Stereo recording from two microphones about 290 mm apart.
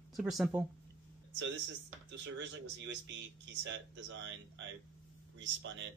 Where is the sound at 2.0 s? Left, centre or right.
Right.